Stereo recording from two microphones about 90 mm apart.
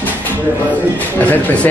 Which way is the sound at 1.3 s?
15° left (ahead or behind).